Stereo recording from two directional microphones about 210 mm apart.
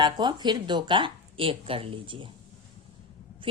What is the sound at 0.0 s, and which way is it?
A woman's voice, 20° right (ahead or behind).